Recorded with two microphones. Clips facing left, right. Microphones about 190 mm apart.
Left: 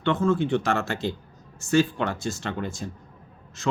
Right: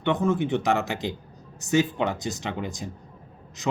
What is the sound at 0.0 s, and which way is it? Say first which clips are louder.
Speech: left 1 dB; 20° right (ahead or behind).